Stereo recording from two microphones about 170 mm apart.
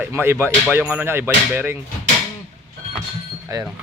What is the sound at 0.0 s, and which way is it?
Speech, 15° right (ahead or behind).